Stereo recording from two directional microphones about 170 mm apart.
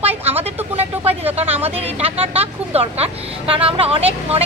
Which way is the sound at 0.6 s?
10° right (ahead or behind).